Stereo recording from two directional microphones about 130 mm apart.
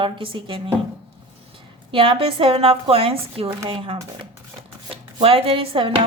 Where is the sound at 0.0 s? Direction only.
40° right (ahead or behind).